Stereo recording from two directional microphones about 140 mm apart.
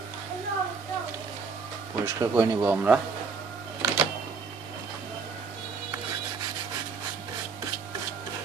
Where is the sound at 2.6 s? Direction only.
10° right (ahead or behind).